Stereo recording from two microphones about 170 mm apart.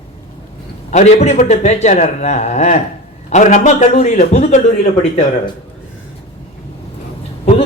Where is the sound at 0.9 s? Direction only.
40° left (ahead or behind).